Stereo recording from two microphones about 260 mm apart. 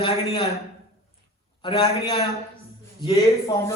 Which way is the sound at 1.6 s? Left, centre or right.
Centre.